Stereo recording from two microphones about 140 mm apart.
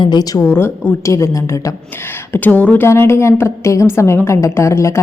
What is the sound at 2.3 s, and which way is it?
A woman's voice, 10° left (ahead or behind).